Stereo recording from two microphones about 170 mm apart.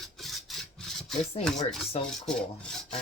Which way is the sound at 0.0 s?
Centre (ahead or behind).